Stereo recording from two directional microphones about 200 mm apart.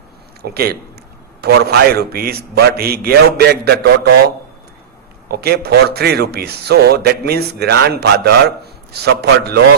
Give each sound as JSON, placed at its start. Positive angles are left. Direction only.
{"t": 0.4, "sound": "speech", "side_deg": -50}
{"t": 5.3, "sound": "speech", "side_deg": -50}